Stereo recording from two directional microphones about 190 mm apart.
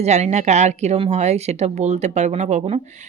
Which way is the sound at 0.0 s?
35° right (ahead or behind).